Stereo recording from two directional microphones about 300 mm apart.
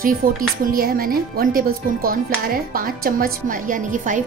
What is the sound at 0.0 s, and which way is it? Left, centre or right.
Speech, right.